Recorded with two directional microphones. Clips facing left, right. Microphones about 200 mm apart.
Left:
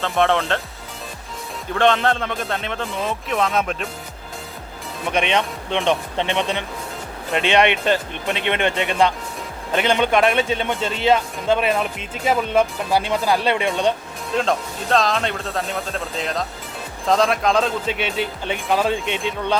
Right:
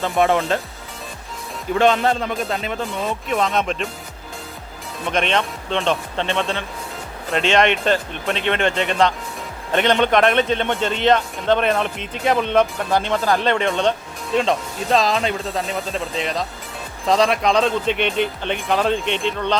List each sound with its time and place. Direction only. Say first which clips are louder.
0.0 s speech: right 1 dB; centre (ahead or behind)
1.7 s speech: right 1 dB; 5° right (ahead or behind)
5.0 s a man's voice: even; 10° left (ahead or behind)
14.3 s a man's voice: right 2 dB; centre (ahead or behind)